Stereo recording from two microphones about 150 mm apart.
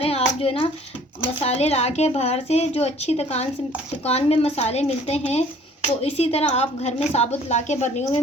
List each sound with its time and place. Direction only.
0.0 s hands: 40° left (ahead or behind)
1.4 s dishes: 40° left (ahead or behind)